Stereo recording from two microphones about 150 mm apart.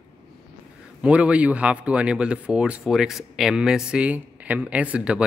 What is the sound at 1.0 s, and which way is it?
Speech, 10° right (ahead or behind).